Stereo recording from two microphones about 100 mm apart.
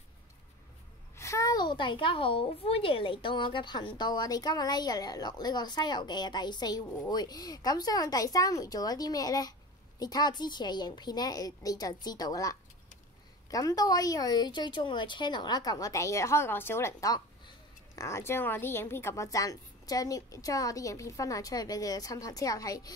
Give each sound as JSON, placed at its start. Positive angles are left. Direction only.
{"t": 1.1, "sound": "a sound", "side_deg": 30}
{"t": 1.6, "sound": "a woman's voice", "side_deg": 50}
{"t": 17.9, "sound": "speech", "side_deg": 30}